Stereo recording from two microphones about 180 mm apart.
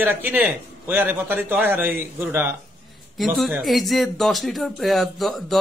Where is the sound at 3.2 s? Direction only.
Centre (ahead or behind).